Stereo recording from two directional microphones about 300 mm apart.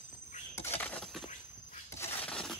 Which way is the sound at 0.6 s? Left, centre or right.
Centre.